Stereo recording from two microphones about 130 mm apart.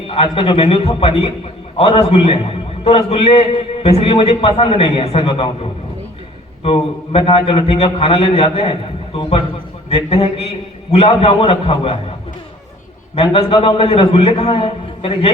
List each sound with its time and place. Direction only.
0.1 s a man's voice: 45° left (ahead or behind)
6.6 s a man's voice: 45° left (ahead or behind)
9.9 s a man's voice: 50° left (ahead or behind)
13.1 s a man's voice: 45° left (ahead or behind)